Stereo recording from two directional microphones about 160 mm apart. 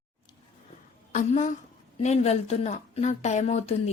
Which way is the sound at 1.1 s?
50° left (ahead or behind).